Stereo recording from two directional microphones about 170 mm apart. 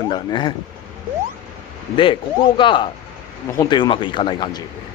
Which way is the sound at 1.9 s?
30° left (ahead or behind).